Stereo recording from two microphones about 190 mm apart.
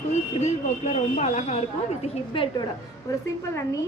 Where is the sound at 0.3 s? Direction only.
35° left (ahead or behind).